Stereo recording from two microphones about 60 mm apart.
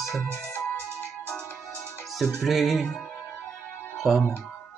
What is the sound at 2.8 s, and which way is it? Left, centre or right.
Speech, centre.